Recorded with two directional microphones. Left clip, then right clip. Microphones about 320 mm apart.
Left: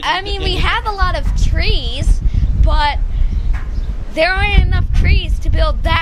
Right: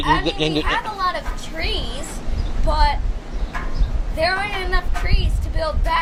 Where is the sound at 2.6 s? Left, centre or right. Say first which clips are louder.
Left 3 dB; left.